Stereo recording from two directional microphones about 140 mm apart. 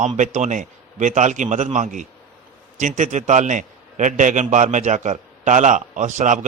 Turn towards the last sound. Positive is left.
turn(degrees=-60)  # may be behind; listen again after turning